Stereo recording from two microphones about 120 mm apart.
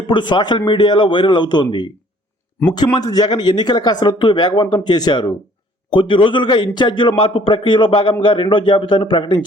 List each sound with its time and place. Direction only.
0.1 s a man's voice: 40° left (ahead or behind)